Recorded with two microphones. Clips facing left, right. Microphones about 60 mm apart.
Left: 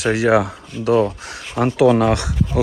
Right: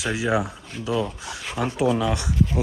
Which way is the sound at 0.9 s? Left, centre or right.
Left.